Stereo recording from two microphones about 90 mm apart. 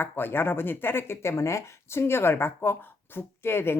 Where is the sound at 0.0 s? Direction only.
25° left (ahead or behind).